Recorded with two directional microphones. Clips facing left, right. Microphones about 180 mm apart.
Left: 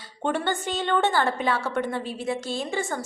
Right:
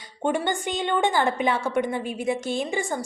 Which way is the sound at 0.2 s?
15° right (ahead or behind).